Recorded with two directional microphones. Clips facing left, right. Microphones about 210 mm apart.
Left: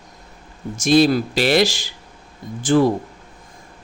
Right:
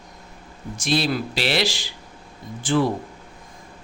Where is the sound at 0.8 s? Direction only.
45° left (ahead or behind).